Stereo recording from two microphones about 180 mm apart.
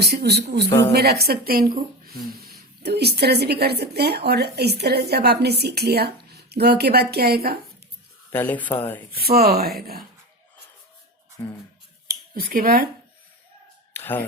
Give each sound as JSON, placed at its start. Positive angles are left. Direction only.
{"t": 0.0, "sound": "speech", "side_deg": -65}
{"t": 8.3, "sound": "speech", "side_deg": 10}
{"t": 9.2, "sound": "speech", "side_deg": -60}
{"t": 12.0, "sound": "speech", "side_deg": -55}
{"t": 13.9, "sound": "a sound", "side_deg": 10}